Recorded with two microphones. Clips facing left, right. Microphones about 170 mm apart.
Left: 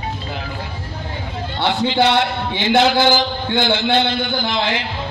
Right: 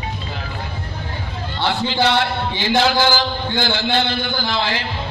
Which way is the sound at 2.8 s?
20° left (ahead or behind).